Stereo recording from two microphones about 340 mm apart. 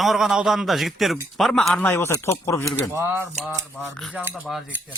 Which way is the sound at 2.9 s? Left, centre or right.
Centre.